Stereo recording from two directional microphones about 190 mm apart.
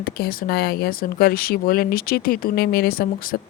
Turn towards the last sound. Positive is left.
turn(degrees=50)  # may be behind; listen again after turning